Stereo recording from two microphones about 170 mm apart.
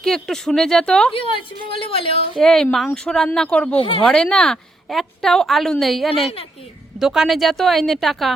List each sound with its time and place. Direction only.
0.0 s a woman's voice: centre (ahead or behind)
1.8 s speech: 35° left (ahead or behind)
2.4 s a woman's voice: 5° left (ahead or behind)
3.8 s speech: 30° left (ahead or behind)
4.0 s a woman's voice: 5° left (ahead or behind)